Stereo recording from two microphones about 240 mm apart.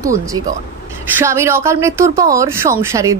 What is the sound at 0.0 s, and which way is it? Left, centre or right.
A woman's voice, centre.